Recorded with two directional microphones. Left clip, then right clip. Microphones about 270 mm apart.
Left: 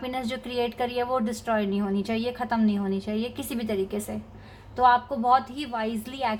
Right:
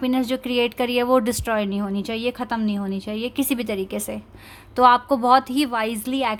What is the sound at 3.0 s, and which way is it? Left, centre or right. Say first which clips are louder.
Speech: right 6 dB; right.